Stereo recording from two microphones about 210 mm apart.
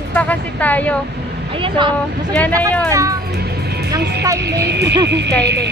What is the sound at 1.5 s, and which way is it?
Speech, 25° right (ahead or behind).